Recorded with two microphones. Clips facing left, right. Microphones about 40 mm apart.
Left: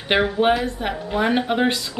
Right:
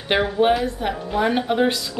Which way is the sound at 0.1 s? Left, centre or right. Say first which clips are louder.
Even; centre.